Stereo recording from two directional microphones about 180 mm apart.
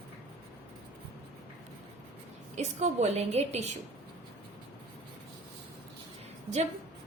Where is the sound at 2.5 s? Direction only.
40° right (ahead or behind).